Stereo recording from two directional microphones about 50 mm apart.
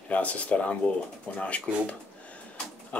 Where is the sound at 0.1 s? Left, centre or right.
Left.